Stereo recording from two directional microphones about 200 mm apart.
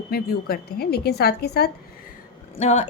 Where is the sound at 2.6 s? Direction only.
35° left (ahead or behind).